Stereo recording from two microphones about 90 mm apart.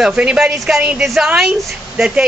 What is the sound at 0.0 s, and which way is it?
A woman's voice, 10° right (ahead or behind).